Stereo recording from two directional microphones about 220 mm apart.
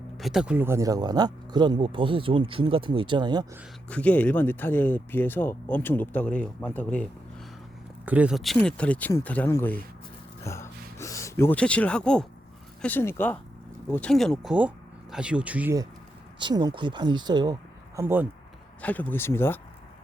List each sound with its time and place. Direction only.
0.2 s speech: centre (ahead or behind); by 3.6 s 20° right (ahead or behind)
3.8 s speech: 5° left (ahead or behind)
8.0 s speech: 5° right (ahead or behind)
18.8 s speech: 5° left (ahead or behind)